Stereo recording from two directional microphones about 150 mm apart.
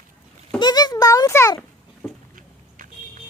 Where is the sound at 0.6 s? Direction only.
30° left (ahead or behind).